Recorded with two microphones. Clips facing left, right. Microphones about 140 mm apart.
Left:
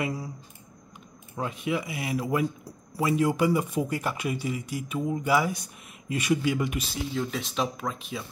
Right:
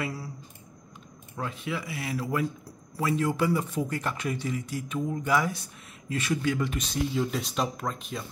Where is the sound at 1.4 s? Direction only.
15° left (ahead or behind).